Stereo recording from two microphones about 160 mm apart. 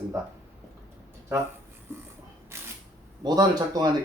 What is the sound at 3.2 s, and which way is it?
Speech, 25° right (ahead or behind).